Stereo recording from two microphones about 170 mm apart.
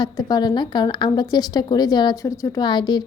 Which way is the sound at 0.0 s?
25° left (ahead or behind).